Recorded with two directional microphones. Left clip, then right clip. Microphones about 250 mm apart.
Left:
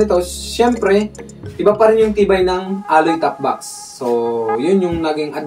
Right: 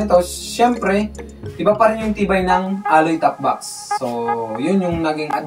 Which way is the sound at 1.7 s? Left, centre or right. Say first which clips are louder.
Left 5 dB; centre.